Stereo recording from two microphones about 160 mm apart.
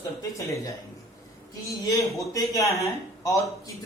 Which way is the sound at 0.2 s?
20° left (ahead or behind).